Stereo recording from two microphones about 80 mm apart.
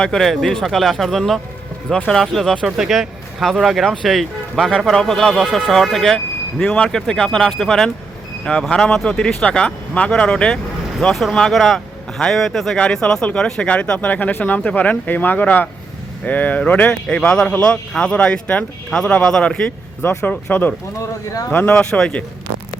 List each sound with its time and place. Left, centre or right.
0.0 s a man's voice: centre
20.0 s a man's voice: left